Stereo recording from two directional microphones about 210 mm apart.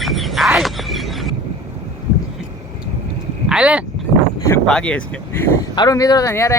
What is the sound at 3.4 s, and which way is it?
Speech, 5° right (ahead or behind).